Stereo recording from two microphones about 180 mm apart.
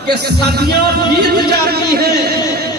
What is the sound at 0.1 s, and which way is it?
A man's voice, 65° right (ahead or behind).